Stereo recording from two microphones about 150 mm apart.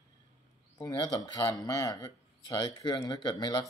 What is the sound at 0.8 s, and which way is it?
Speech, 25° left (ahead or behind).